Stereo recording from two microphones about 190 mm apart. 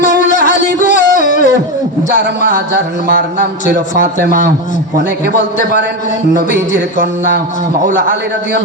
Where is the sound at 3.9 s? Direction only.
40° left (ahead or behind).